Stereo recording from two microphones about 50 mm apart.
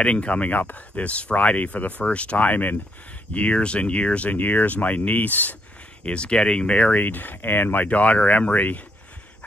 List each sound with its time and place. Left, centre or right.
0.0 s speech: left
3.3 s speech: left
6.0 s speech: left